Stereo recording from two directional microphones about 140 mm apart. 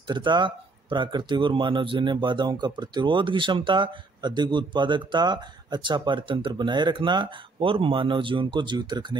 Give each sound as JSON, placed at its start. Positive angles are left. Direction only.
{"t": 0.0, "sound": "speech", "side_deg": -35}